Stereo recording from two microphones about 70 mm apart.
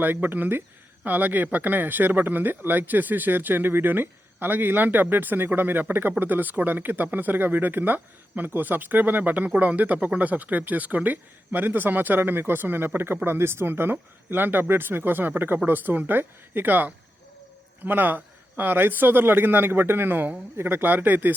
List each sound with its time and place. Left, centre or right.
0.0 s speech: right